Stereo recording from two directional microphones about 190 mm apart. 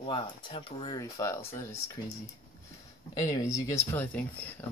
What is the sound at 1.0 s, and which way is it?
Speech, 15° left (ahead or behind).